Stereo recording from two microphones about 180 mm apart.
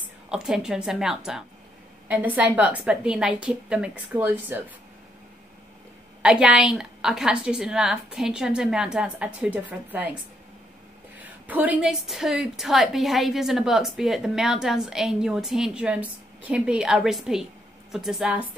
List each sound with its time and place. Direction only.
0.3 s a woman's voice: 5° right (ahead or behind)
6.2 s a woman's voice: 5° right (ahead or behind)
11.1 s a woman's voice: 10° right (ahead or behind)